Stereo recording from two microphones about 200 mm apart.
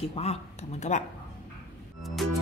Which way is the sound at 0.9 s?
35° left (ahead or behind).